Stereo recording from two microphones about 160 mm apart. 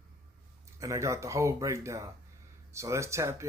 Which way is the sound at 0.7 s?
20° right (ahead or behind).